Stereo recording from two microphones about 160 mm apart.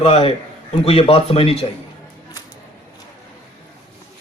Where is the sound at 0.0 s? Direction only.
40° left (ahead or behind).